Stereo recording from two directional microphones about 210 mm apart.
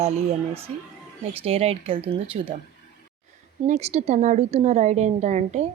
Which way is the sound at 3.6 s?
30° right (ahead or behind).